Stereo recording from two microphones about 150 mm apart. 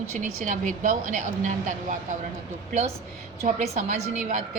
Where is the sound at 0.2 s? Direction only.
60° right (ahead or behind).